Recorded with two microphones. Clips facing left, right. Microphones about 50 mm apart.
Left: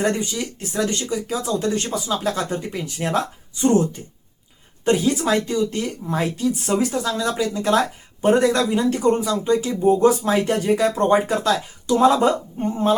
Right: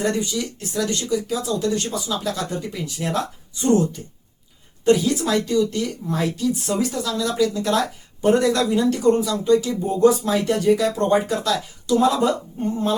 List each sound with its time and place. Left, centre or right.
0.2 s speech: left
4.9 s speech: left